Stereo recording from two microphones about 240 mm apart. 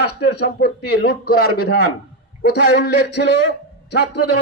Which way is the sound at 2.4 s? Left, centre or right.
Left.